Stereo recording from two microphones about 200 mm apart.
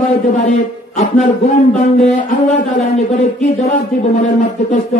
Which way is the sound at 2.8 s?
35° left (ahead or behind).